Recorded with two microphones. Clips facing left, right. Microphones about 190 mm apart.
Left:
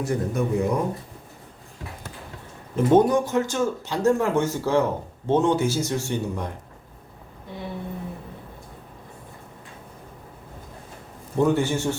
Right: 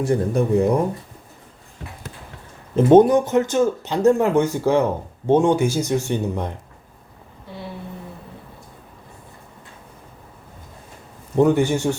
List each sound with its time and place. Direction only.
0.0 s speech: 30° right (ahead or behind)
2.7 s speech: 20° right (ahead or behind)
11.3 s speech: 15° right (ahead or behind)